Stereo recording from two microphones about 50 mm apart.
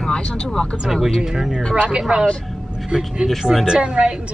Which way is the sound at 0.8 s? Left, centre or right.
Centre.